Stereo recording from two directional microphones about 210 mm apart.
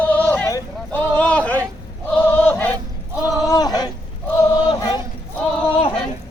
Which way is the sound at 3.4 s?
20° left (ahead or behind).